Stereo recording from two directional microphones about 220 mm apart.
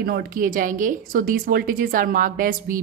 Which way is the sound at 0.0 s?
45° right (ahead or behind).